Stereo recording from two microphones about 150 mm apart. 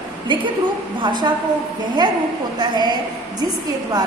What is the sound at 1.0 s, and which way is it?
Speech, 30° right (ahead or behind).